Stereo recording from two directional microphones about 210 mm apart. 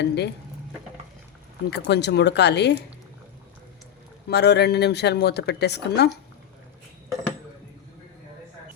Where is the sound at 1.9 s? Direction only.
55° left (ahead or behind).